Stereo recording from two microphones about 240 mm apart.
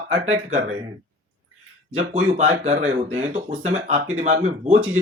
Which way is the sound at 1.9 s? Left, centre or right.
Right.